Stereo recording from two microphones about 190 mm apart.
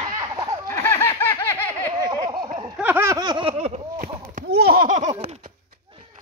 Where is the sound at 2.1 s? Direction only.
20° right (ahead or behind).